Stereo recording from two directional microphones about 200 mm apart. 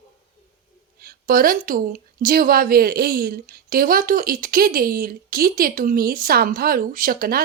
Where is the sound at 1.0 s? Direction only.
45° right (ahead or behind).